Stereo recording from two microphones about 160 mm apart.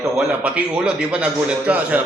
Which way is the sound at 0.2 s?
10° right (ahead or behind).